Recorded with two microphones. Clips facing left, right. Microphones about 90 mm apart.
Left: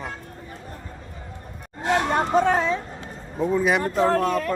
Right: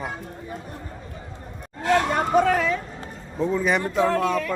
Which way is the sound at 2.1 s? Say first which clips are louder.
Even; 30° left (ahead or behind).